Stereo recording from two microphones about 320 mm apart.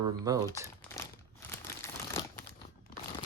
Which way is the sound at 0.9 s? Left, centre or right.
Centre.